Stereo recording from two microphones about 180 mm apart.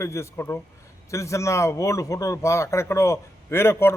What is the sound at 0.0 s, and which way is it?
Speech, 15° left (ahead or behind).